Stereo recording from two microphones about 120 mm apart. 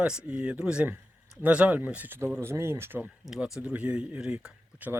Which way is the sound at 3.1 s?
5° right (ahead or behind).